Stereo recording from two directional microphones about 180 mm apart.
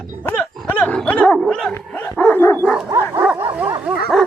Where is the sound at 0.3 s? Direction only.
10° left (ahead or behind).